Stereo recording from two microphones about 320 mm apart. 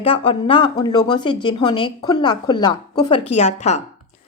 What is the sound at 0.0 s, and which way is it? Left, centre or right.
A woman's voice, centre.